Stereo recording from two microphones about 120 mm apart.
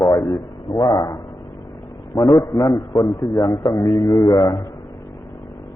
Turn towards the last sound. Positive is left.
turn(degrees=45)  # may be behind; listen again after turning